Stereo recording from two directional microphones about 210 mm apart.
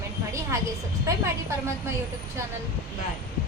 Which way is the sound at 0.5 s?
15° right (ahead or behind).